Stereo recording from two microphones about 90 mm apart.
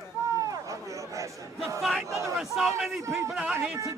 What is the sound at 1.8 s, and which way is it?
Speech, centre (ahead or behind).